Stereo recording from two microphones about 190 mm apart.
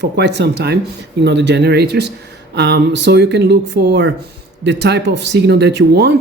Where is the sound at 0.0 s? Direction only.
60° right (ahead or behind).